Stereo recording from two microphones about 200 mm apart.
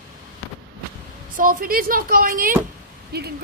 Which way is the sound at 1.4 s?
45° right (ahead or behind).